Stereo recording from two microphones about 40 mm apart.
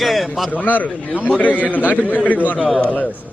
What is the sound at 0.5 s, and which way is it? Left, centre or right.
A man's voice, left.